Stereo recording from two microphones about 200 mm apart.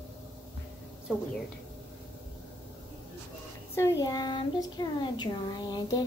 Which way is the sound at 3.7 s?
15° left (ahead or behind).